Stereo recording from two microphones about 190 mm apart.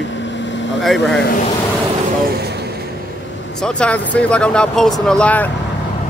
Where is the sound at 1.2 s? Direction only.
50° left (ahead or behind).